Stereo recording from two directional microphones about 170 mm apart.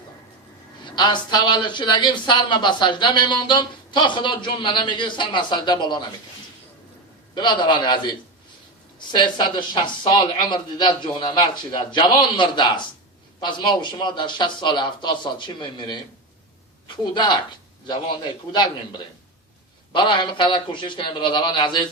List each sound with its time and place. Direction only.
0.9 s speech: 25° left (ahead or behind)
7.3 s speech: 25° left (ahead or behind)
9.1 s speech: 25° left (ahead or behind)
18.5 s speech: 25° left (ahead or behind)